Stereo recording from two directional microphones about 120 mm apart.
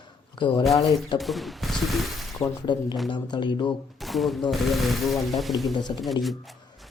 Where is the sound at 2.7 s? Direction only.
40° left (ahead or behind).